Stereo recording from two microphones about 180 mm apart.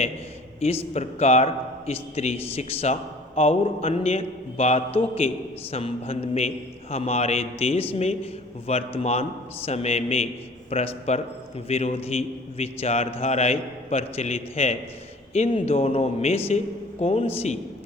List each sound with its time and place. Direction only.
0.6 s a man's voice: 35° left (ahead or behind)